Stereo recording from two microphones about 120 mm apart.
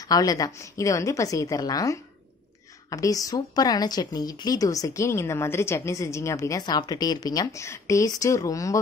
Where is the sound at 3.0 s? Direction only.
30° left (ahead or behind).